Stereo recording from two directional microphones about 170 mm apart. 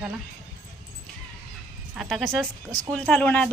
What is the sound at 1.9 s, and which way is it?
A woman's voice, centre (ahead or behind).